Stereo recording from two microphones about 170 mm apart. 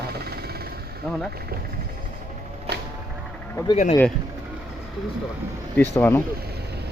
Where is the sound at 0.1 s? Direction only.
70° right (ahead or behind).